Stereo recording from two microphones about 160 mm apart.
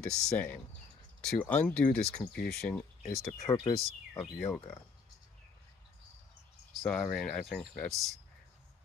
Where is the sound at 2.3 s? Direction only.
75° left (ahead or behind).